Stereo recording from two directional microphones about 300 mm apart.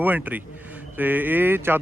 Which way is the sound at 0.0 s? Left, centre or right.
Centre.